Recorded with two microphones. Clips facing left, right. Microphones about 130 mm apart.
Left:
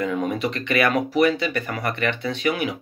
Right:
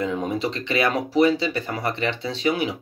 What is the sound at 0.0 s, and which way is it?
Speech, 25° right (ahead or behind).